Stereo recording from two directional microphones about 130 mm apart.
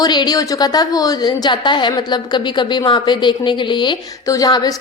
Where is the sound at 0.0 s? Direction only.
35° left (ahead or behind).